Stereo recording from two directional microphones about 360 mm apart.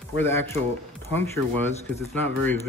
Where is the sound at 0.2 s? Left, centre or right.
Centre.